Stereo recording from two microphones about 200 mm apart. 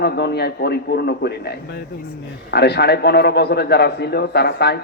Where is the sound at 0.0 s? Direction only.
55° left (ahead or behind).